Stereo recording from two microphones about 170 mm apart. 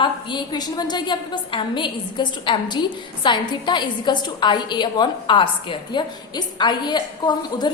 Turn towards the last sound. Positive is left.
turn(degrees=25)  # may be behind; listen again after turning